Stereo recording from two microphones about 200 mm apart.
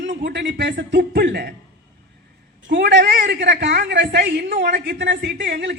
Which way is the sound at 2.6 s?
60° right (ahead or behind).